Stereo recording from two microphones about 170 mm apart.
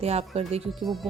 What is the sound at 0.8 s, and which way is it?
Speech, centre (ahead or behind).